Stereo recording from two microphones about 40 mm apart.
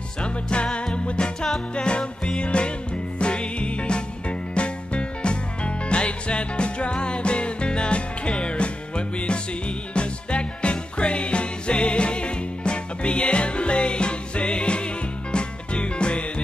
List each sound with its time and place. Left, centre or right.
0.2 s music: left